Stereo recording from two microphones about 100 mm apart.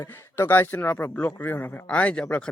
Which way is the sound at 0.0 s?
25° left (ahead or behind).